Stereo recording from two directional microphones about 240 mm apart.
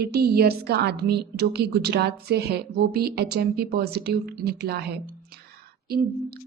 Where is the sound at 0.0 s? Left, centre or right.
Right.